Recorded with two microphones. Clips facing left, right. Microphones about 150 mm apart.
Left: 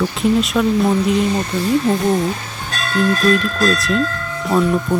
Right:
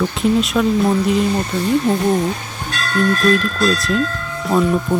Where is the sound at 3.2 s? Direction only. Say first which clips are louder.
Even; centre (ahead or behind).